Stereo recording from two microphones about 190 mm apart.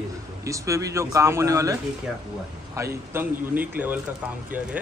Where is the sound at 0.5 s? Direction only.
15° right (ahead or behind).